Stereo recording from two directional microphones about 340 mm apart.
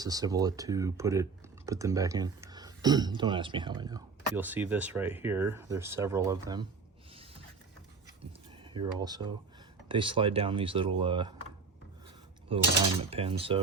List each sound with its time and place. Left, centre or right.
0.0 s speech: centre
8.6 s speech: centre
12.5 s speech: centre